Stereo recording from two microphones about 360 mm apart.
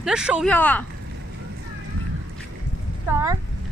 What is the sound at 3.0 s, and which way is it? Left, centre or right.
Speech, centre.